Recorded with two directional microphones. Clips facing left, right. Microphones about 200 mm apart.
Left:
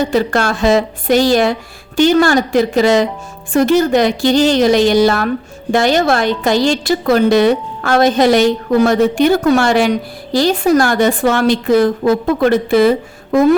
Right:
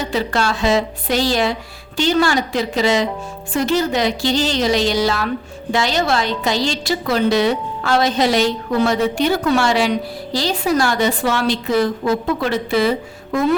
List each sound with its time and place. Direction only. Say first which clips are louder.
0.0 s a woman's voice: left 5 dB; 50° left (ahead or behind)